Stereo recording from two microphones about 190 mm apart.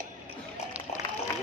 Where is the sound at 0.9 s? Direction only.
35° left (ahead or behind).